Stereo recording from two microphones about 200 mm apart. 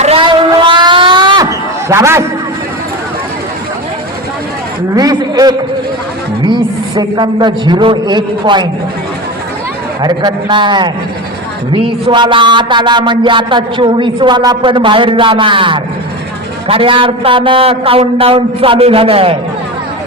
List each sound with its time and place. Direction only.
0.0 s a sound: 25° right (ahead or behind)
4.9 s a man's voice: 20° right (ahead or behind)
10.0 s a man's voice: 20° right (ahead or behind)